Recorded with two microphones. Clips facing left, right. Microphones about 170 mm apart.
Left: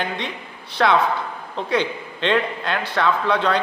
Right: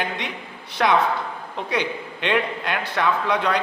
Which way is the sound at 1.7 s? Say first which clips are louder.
Left 3 dB; 15° right (ahead or behind).